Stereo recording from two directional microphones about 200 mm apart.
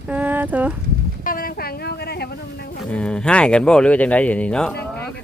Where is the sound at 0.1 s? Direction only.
10° right (ahead or behind).